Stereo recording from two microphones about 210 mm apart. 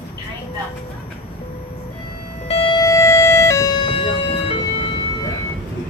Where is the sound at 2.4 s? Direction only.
25° left (ahead or behind).